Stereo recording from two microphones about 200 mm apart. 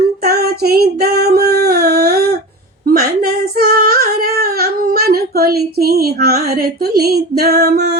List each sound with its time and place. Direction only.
0.3 s female singing: 50° right (ahead or behind)
2.8 s child singing: 50° right (ahead or behind)
6.9 s female singing: 50° right (ahead or behind)